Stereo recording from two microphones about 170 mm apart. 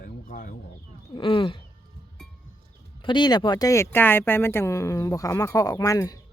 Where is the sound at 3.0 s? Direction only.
25° left (ahead or behind).